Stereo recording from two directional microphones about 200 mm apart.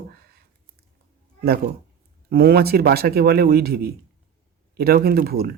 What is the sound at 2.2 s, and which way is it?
Speech, 50° right (ahead or behind).